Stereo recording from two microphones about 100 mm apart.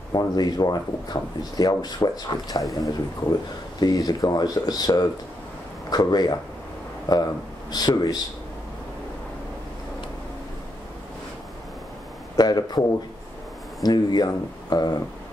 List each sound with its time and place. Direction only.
0.1 s speech: 40° left (ahead or behind)
12.4 s speech: 45° left (ahead or behind)
13.8 s speech: 40° left (ahead or behind)